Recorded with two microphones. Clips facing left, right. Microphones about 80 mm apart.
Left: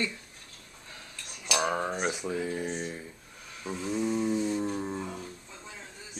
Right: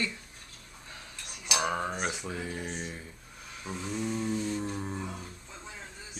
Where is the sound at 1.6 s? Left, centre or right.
Centre.